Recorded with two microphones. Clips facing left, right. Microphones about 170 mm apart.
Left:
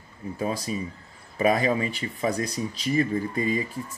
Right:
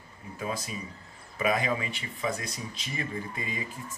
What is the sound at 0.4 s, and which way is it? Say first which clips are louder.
Speech: left 6 dB; 35° left (ahead or behind).